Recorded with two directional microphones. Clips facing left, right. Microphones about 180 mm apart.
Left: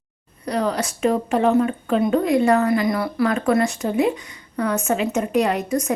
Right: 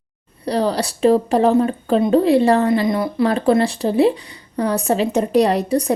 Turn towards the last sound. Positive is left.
turn(degrees=-35)  # may be behind; listen again after turning